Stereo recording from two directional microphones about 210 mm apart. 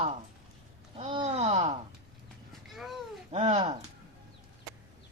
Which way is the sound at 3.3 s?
30° right (ahead or behind).